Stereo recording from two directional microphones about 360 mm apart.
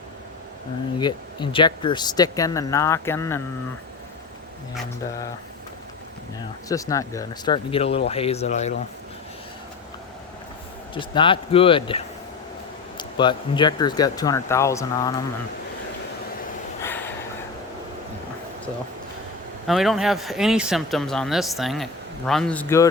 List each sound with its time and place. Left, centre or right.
0.9 s speech: centre
6.7 s speech: centre
10.9 s speech: centre
16.8 s snort: centre
19.6 s speech: centre